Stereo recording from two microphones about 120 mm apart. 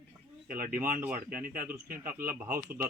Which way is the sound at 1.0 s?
15° right (ahead or behind).